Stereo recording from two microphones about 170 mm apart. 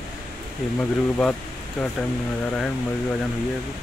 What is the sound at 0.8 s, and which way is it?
Speech, 5° left (ahead or behind).